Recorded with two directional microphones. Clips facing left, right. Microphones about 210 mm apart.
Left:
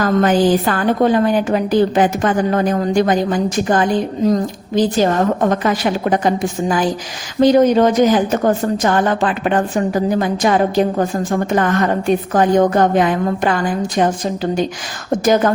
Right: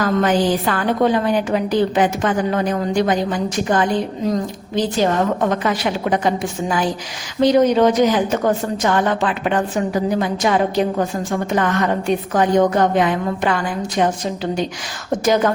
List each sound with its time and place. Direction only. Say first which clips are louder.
0.0 s a woman's voice: left 3 dB; 45° left (ahead or behind)
15.2 s a woman's voice: left 2 dB; 50° left (ahead or behind)